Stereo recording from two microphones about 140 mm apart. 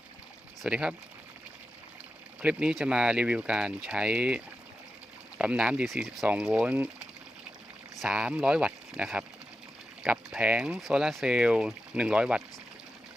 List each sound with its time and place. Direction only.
0.6 s speech: 5° right (ahead or behind)
2.4 s speech: 10° right (ahead or behind)